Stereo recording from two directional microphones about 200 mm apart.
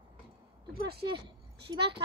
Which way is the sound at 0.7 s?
50° right (ahead or behind).